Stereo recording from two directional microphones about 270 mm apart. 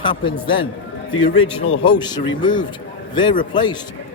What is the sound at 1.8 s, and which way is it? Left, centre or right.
Speech, centre.